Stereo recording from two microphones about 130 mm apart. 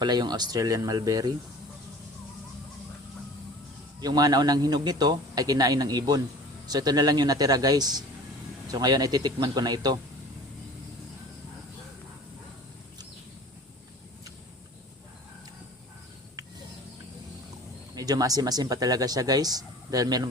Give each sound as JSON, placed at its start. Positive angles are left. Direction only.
{"t": 0.0, "sound": "speech", "side_deg": -35}
{"t": 4.0, "sound": "a man's voice", "side_deg": -30}
{"t": 17.9, "sound": "speech", "side_deg": -30}